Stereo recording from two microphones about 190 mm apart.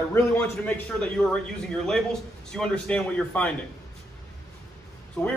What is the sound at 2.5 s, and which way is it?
A man's voice, 5° left (ahead or behind).